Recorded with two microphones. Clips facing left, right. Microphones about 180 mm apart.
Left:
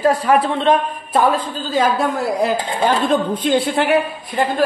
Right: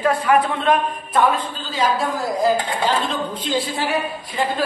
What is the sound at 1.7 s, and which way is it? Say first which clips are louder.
A woman's voice: left 4 dB; 60° left (ahead or behind).